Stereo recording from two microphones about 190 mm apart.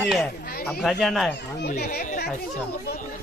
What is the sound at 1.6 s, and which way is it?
Speech, 55° left (ahead or behind).